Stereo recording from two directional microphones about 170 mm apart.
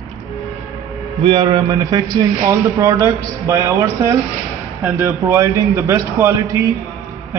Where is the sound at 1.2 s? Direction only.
30° right (ahead or behind).